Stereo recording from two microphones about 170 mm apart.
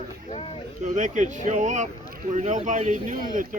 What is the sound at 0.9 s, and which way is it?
Speech, 45° right (ahead or behind).